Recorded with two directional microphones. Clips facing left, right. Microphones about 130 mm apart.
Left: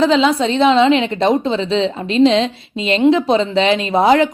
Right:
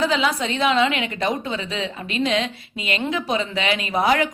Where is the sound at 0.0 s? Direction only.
25° left (ahead or behind).